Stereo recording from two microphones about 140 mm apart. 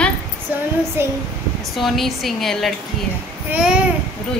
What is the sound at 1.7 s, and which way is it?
A woman's voice, centre (ahead or behind).